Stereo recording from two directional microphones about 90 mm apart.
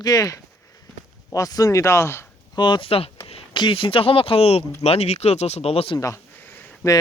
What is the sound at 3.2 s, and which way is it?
Speech, 65° left (ahead or behind).